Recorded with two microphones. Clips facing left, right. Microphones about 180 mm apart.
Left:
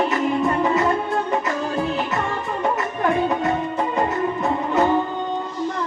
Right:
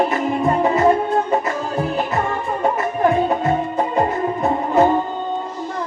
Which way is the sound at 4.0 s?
30° right (ahead or behind).